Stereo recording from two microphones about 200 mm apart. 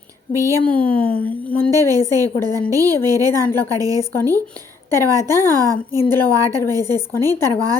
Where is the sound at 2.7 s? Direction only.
15° right (ahead or behind).